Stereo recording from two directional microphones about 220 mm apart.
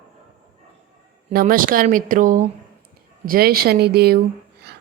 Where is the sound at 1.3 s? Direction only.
40° right (ahead or behind).